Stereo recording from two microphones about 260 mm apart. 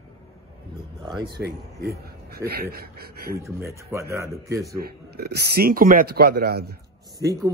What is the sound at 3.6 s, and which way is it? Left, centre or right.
Speech, centre.